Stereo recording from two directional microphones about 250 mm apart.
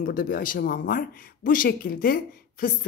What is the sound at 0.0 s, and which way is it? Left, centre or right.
Speech, left.